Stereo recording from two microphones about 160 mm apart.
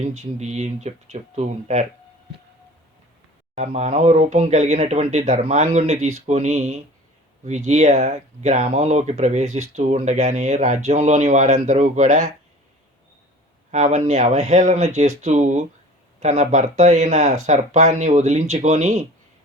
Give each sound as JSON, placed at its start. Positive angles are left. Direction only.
{"t": 0.0, "sound": "speech", "side_deg": -45}
{"t": 3.5, "sound": "speech", "side_deg": -45}
{"t": 13.7, "sound": "speech", "side_deg": -45}